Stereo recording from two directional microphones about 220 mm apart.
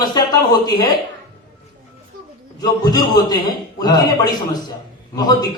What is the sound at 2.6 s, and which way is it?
A man's voice, 15° left (ahead or behind).